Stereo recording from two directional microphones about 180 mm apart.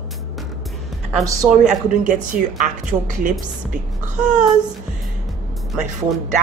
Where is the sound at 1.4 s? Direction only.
15° right (ahead or behind).